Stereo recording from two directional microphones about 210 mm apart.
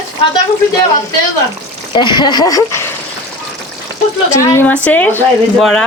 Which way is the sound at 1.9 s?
20° left (ahead or behind).